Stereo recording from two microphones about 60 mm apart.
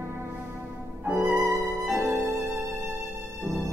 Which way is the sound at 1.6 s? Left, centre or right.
Right.